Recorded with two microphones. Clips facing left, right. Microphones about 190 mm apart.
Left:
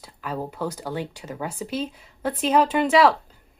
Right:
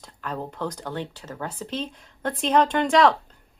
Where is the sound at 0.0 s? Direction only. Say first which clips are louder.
Left 2 dB; 5° left (ahead or behind).